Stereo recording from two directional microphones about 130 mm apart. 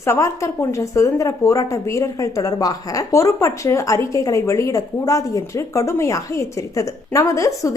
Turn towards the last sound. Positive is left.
turn(degrees=25)  # may be behind; listen again after turning